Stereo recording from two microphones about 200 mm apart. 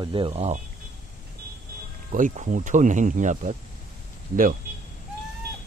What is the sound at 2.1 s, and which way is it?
Speech, 40° right (ahead or behind).